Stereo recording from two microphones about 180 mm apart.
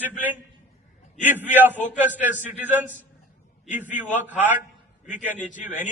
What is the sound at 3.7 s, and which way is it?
Speech, 45° left (ahead or behind).